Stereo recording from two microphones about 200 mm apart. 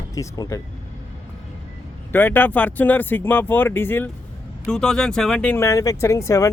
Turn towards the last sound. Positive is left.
turn(degrees=15)  # may be behind; listen again after turning